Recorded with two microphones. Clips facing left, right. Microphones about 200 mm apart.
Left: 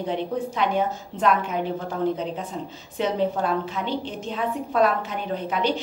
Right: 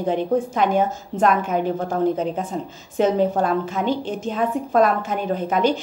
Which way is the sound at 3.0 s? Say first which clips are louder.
Right 5 dB; 45° right (ahead or behind).